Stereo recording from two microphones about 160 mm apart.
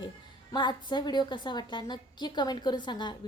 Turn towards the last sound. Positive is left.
turn(degrees=30)  # may be behind; listen again after turning